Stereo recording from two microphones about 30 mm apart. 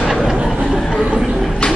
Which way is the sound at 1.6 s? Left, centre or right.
Left.